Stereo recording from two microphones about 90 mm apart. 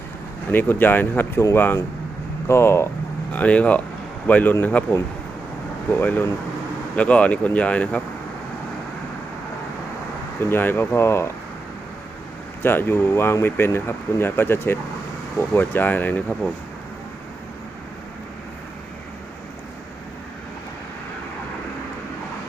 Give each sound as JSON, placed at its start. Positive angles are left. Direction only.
{"t": 0.5, "sound": "speech", "side_deg": 20}
{"t": 3.3, "sound": "speech", "side_deg": 15}
{"t": 6.0, "sound": "speech", "side_deg": 20}
{"t": 10.4, "sound": "speech", "side_deg": 25}
{"t": 12.6, "sound": "speech", "side_deg": 25}